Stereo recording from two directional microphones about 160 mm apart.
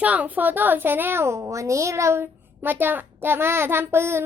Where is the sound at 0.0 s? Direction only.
10° right (ahead or behind).